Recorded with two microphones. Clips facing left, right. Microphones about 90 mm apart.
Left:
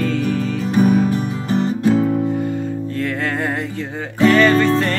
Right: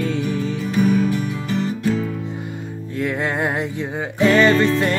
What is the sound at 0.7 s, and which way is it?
Music, 35° left (ahead or behind).